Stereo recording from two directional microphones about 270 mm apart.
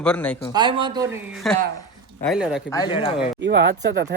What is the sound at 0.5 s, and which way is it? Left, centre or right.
Speech, centre.